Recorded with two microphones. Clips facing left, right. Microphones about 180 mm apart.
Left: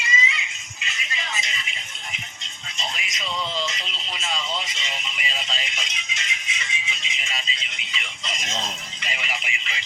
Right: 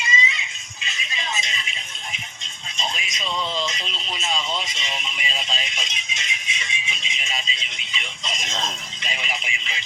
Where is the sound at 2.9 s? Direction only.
25° right (ahead or behind).